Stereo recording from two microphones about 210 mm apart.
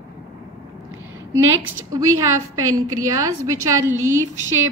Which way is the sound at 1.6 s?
15° right (ahead or behind).